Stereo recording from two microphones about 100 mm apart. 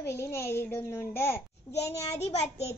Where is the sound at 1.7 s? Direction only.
90° left.